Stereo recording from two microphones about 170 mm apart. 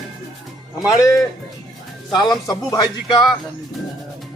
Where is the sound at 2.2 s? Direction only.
25° left (ahead or behind).